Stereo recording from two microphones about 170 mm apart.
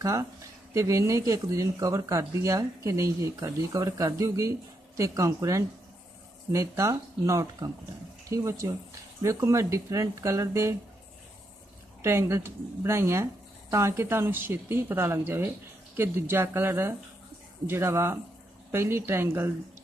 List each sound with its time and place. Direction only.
0.0 s speech: 20° right (ahead or behind)
12.0 s speech: 15° right (ahead or behind)